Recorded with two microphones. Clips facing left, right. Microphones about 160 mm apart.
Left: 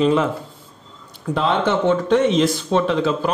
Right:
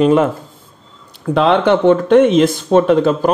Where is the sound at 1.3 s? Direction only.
70° right (ahead or behind); by 3.3 s 50° right (ahead or behind).